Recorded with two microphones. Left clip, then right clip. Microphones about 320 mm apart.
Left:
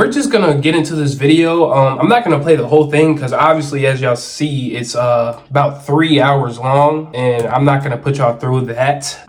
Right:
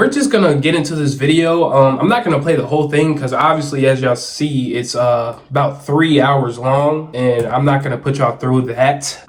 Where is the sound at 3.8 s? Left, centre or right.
Left.